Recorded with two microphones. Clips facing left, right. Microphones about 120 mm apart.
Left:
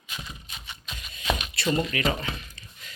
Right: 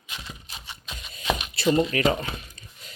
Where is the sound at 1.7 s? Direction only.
30° right (ahead or behind).